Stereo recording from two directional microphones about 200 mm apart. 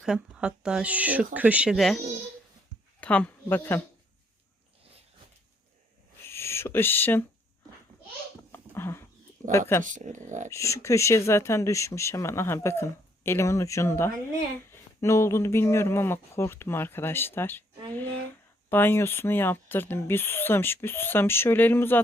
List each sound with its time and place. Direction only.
0.0 s speech: 5° right (ahead or behind)
3.0 s speech: 5° left (ahead or behind)
6.2 s speech: 15° left (ahead or behind)
8.5 s a sound: 10° left (ahead or behind)
9.5 s speech: 15° left (ahead or behind)
9.8 s speech: 40° right (ahead or behind)
10.5 s speech: 15° left (ahead or behind)
18.7 s speech: 10° left (ahead or behind)